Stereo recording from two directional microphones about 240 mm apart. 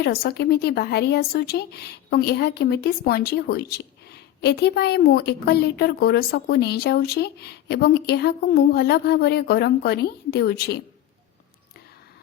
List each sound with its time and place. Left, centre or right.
0.0 s a woman's voice: left